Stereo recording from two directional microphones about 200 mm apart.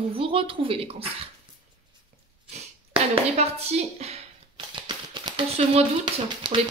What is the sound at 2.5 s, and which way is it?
Speech, 30° right (ahead or behind).